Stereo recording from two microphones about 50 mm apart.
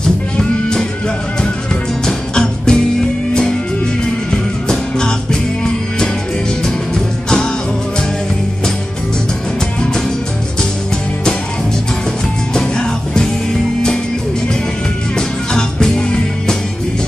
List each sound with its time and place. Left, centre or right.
0.4 s music: centre
2.0 s music: centre
4.6 s music: centre
12.5 s music: centre
15.1 s music: centre